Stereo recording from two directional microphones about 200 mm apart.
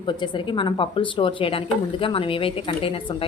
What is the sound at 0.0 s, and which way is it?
Speech, 25° left (ahead or behind).